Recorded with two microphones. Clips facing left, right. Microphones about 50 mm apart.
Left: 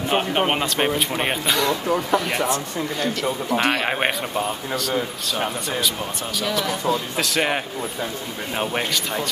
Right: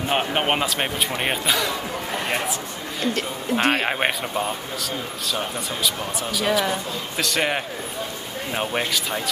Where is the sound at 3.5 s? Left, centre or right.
Right.